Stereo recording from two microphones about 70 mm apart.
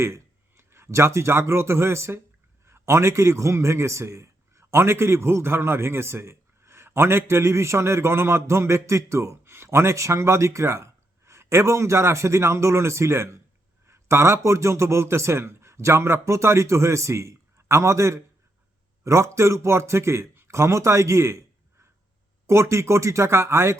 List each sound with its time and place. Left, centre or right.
0.0 s a man's voice: right
13.8 s a sound: right
14.4 s a man's voice: right
22.4 s a man's voice: right